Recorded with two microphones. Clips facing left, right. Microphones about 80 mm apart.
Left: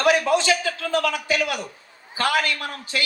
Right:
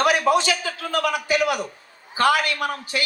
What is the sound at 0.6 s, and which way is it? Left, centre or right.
Speech, right.